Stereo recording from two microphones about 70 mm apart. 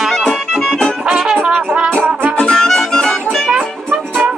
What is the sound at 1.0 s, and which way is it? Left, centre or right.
Music, centre.